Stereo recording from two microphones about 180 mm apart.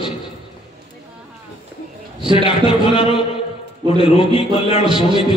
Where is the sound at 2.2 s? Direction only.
25° right (ahead or behind).